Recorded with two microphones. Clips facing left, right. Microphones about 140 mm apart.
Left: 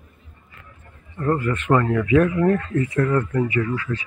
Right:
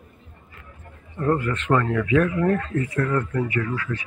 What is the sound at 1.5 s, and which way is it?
Speech, 15° left (ahead or behind).